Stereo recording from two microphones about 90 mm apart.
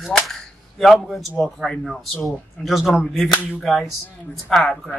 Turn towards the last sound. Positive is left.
turn(degrees=5)  # may be behind; listen again after turning